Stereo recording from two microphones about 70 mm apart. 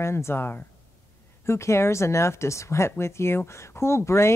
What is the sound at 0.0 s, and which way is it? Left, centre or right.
Speech, left.